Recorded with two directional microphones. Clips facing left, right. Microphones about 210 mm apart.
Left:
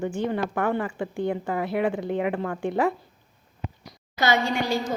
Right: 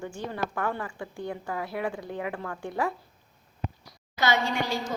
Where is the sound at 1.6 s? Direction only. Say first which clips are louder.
Left 7 dB; 65° left (ahead or behind).